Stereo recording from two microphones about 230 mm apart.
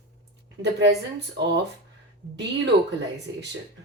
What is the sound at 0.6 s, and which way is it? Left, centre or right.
Speech, right.